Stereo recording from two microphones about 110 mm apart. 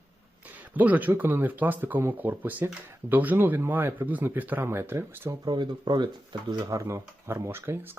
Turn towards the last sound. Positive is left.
turn(degrees=-20)  # may be behind; listen again after turning